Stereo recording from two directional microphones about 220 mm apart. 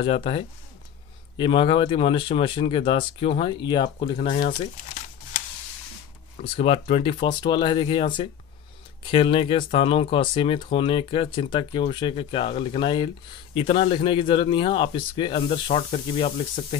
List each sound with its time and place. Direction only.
0.0 s speech: 25° left (ahead or behind)
6.4 s speech: 25° left (ahead or behind)